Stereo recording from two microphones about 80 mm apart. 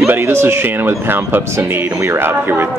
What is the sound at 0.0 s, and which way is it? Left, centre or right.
Speech, right.